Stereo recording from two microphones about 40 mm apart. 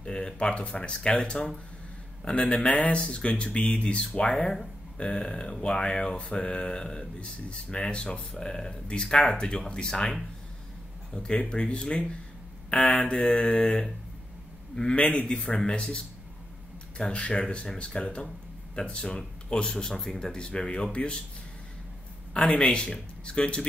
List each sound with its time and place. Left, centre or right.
0.0 s speech: left
11.1 s speech: left
15.0 s a man's voice: left
22.3 s speech: left